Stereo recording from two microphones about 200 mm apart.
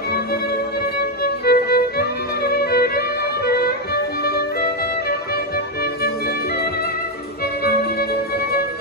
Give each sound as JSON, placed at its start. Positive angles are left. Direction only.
{"t": 1.2, "sound": "violin", "side_deg": 50}
{"t": 3.4, "sound": "music", "side_deg": 50}